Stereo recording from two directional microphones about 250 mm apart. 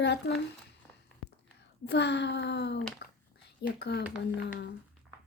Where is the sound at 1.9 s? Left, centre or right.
Left.